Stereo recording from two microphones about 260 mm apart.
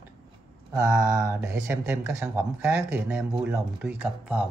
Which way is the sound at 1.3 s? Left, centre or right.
Centre.